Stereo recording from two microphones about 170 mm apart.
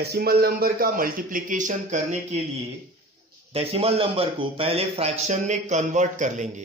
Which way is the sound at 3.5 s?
35° right (ahead or behind).